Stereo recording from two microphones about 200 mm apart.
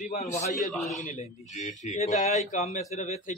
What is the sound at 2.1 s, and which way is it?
A man's voice, 35° left (ahead or behind).